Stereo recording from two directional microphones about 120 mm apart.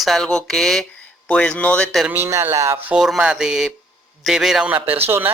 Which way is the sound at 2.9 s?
5° right (ahead or behind).